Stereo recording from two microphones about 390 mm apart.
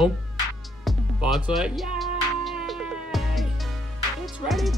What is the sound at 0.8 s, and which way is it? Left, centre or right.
Music, centre.